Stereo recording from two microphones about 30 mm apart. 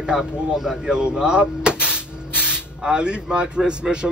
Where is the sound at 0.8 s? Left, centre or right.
Right.